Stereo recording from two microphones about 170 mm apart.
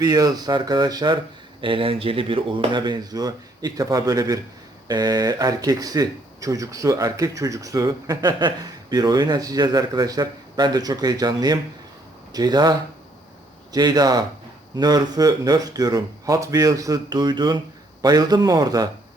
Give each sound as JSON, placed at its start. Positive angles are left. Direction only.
{"t": 0.0, "sound": "speech", "side_deg": -20}
{"t": 13.7, "sound": "speech", "side_deg": -25}